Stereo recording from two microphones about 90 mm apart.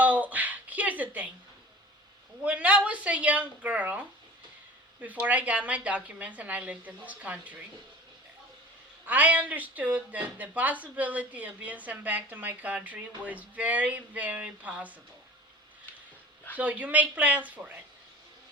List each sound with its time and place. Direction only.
0.0 s a sound: 20° right (ahead or behind)
2.4 s speech: 15° right (ahead or behind)
9.0 s speech: 15° right (ahead or behind)
16.6 s speech: 15° right (ahead or behind)